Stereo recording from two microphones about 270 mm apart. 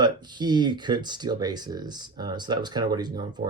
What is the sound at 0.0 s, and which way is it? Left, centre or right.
Speech, centre.